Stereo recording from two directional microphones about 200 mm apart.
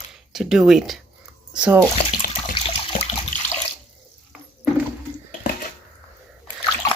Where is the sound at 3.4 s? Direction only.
10° left (ahead or behind).